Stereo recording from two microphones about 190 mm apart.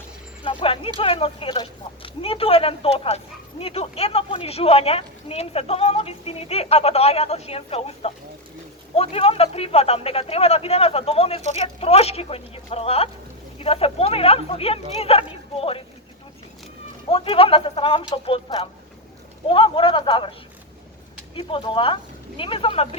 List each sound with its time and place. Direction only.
0.4 s a sound: 30° left (ahead or behind)
0.9 s a woman's voice: 30° left (ahead or behind)
17.1 s speech: 30° left (ahead or behind)
21.3 s speech: 30° left (ahead or behind)